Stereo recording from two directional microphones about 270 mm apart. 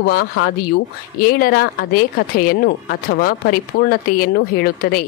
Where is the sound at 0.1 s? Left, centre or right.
Left.